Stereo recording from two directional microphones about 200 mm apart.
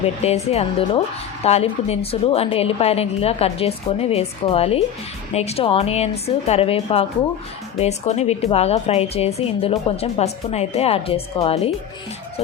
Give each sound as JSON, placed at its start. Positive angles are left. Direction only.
{"t": 0.2, "sound": "a woman's voice", "side_deg": 30}